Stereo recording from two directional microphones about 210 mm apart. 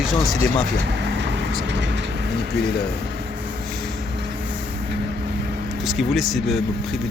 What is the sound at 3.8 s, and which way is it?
Vehicle, 50° right (ahead or behind).